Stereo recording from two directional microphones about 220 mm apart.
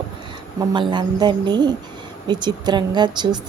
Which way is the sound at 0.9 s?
20° right (ahead or behind).